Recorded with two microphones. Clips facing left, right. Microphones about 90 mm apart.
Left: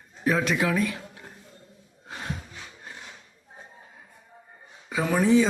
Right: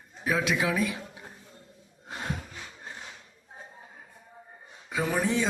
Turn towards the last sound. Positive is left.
turn(degrees=0)  # may be behind; listen again after turning